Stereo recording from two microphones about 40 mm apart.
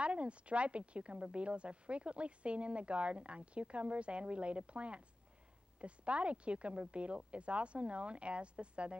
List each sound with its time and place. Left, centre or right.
0.0 s a woman's voice: right